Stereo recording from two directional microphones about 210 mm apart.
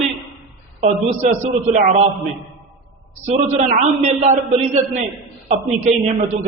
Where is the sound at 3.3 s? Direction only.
30° right (ahead or behind).